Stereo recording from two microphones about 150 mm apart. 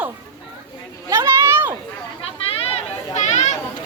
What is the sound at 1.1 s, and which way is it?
Children playing, 20° right (ahead or behind).